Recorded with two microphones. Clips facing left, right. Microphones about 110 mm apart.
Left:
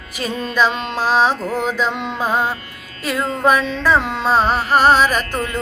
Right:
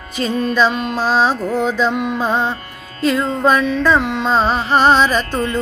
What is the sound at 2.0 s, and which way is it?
Mantra, 25° left (ahead or behind).